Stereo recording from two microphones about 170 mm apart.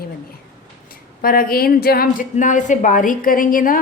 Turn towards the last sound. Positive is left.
turn(degrees=55)  # may be behind; listen again after turning